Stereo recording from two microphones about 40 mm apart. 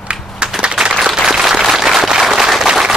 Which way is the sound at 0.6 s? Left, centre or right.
Right.